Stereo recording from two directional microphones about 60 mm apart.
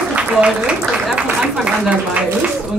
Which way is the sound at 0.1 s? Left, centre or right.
Centre.